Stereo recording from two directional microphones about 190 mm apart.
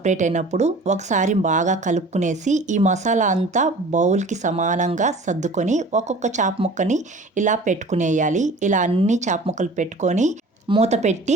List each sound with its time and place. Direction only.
0.0 s speech: 40° right (ahead or behind)